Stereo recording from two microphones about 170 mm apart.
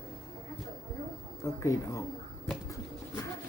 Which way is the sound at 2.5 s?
5° left (ahead or behind).